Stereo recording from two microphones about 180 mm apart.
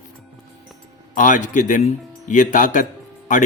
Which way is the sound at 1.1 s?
45° left (ahead or behind).